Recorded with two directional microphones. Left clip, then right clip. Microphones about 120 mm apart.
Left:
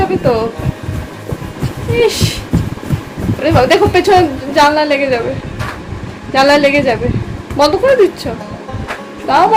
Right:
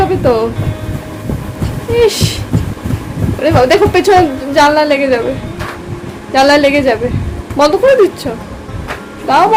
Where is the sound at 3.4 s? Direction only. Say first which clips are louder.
Right 1 dB; 20° right (ahead or behind).